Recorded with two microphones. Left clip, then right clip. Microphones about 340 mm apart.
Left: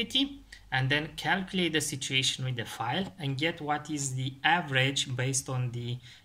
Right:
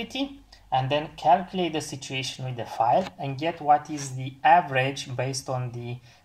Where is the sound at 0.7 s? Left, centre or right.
Left.